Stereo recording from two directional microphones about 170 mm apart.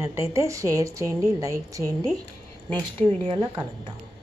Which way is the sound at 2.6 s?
10° left (ahead or behind).